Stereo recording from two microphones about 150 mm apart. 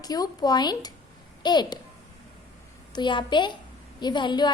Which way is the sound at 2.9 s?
30° left (ahead or behind).